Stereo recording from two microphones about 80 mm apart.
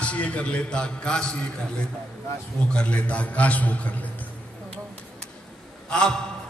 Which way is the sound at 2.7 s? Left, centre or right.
Centre.